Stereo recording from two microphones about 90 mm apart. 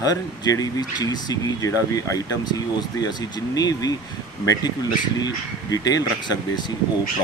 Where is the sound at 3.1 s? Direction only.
50° left (ahead or behind).